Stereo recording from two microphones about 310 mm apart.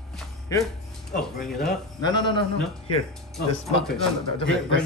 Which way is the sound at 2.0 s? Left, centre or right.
Centre.